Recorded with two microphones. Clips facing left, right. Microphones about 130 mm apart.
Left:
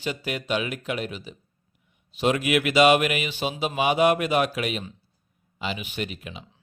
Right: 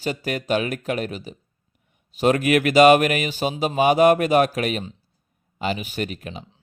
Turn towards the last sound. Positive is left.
turn(degrees=-40)  # may be behind; listen again after turning